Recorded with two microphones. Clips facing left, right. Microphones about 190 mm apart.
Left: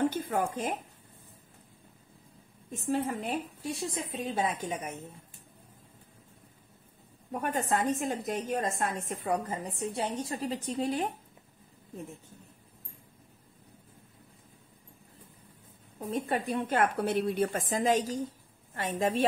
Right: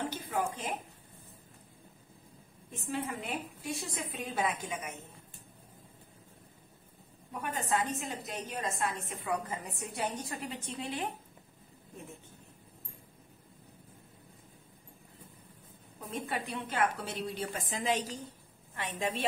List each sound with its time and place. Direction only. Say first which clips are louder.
0.1 s a sound: left 4 dB; 50° left (ahead or behind)
2.7 s a woman's voice: left 6 dB; 40° left (ahead or behind)
7.3 s a woman's voice: left 3 dB; 45° left (ahead or behind)
16.1 s a woman's voice: left 6 dB; 40° left (ahead or behind)